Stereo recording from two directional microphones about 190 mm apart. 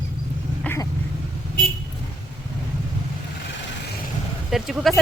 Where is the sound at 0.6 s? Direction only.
15° left (ahead or behind).